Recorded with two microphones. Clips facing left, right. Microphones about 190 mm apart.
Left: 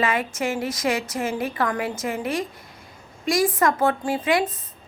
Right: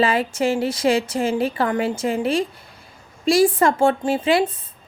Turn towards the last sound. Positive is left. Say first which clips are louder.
# right 4 dB
turn(degrees=-30)  # may be behind; listen again after turning